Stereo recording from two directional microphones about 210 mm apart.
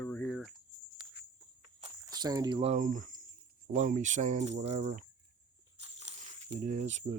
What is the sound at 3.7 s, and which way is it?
Cricket, 35° right (ahead or behind).